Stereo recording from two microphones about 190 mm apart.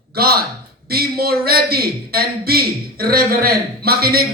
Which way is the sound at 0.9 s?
55° right (ahead or behind).